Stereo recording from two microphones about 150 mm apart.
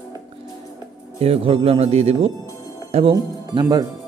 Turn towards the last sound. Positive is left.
turn(degrees=-25)  # may be behind; listen again after turning